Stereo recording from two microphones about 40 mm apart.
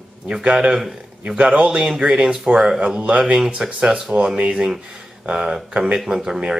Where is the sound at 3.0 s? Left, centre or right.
Right.